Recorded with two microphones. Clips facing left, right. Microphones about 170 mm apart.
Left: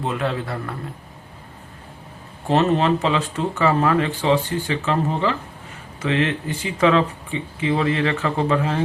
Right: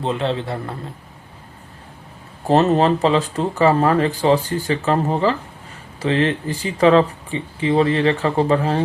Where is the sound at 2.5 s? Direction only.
40° right (ahead or behind).